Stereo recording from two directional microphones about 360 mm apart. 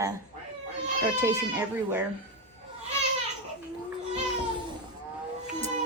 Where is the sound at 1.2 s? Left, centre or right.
Centre.